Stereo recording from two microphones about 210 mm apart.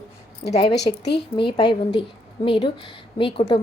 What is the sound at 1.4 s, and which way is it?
A woman's voice, 20° left (ahead or behind).